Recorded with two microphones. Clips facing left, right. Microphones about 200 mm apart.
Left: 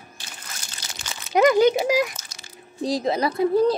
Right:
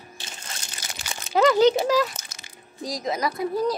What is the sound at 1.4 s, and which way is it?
Speech, 15° left (ahead or behind).